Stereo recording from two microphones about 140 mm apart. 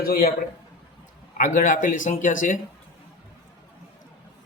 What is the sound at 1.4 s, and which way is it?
Speech, 70° left (ahead or behind).